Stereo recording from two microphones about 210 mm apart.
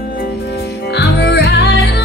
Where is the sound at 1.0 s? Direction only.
50° left (ahead or behind).